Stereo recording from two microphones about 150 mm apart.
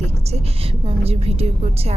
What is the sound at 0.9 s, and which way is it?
Speech, 40° right (ahead or behind).